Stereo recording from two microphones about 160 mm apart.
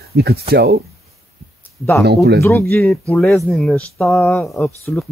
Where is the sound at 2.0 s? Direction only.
90° right.